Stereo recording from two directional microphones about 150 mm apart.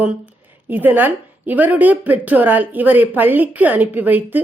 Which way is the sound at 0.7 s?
10° right (ahead or behind).